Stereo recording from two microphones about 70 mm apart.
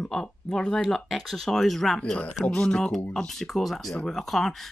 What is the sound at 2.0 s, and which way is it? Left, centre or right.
Speech, centre.